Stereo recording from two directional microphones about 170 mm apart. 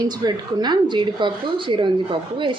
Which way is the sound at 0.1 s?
25° right (ahead or behind).